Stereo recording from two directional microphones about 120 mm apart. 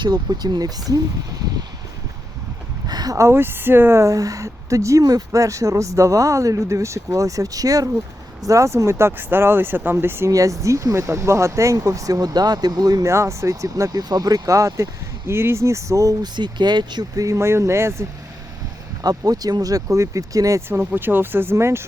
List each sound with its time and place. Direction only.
0.0 s speech: 35° right (ahead or behind)
2.8 s speech: 35° right (ahead or behind)
19.0 s speech: 30° right (ahead or behind)